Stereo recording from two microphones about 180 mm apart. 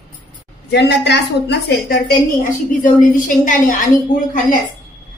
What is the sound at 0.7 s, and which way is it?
A woman's voice, 70° left (ahead or behind).